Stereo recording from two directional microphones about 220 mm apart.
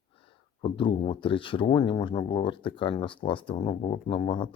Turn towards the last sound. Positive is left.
turn(degrees=25)  # may be behind; listen again after turning